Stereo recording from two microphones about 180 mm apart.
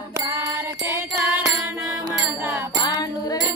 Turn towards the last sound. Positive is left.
turn(degrees=20)  # may be behind; listen again after turning